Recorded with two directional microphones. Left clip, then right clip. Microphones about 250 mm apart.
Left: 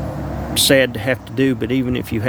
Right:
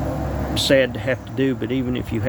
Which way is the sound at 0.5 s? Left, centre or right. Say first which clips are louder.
Left 3 dB; left.